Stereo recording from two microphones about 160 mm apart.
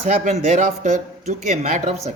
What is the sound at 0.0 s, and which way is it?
Speech, 45° right (ahead or behind).